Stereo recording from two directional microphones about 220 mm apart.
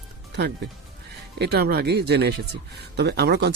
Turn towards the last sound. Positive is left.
turn(degrees=-50)  # may be behind; listen again after turning